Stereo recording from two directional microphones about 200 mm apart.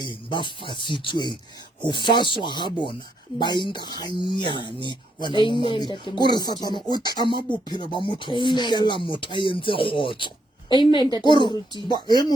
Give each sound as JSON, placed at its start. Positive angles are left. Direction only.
{"t": 0.0, "sound": "speech", "side_deg": 25}